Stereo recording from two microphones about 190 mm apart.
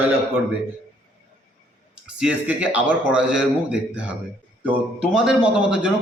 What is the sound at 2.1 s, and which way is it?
A man's voice, 5° right (ahead or behind).